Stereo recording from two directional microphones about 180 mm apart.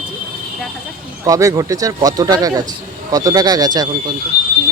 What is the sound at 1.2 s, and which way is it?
A man's voice, 20° right (ahead or behind).